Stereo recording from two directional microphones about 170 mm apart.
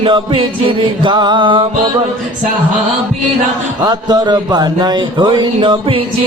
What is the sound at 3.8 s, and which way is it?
Speech, 25° right (ahead or behind).